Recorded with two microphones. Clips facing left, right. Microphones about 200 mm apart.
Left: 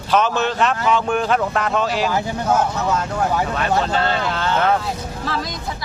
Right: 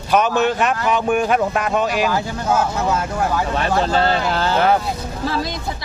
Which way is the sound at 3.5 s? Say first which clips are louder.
Right 1 dB; 35° right (ahead or behind).